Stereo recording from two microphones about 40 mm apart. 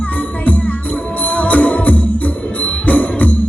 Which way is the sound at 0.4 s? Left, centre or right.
Left.